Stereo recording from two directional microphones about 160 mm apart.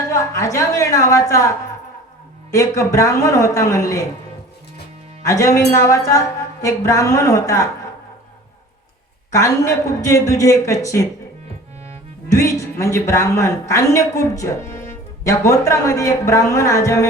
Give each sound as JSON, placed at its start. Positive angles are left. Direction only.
{"t": 0.1, "sound": "a woman's voice", "side_deg": 20}
{"t": 2.5, "sound": "a woman's voice", "side_deg": 20}
{"t": 5.2, "sound": "a woman's voice", "side_deg": 20}
{"t": 9.3, "sound": "a woman's voice", "side_deg": 20}
{"t": 12.3, "sound": "a woman's voice", "side_deg": 20}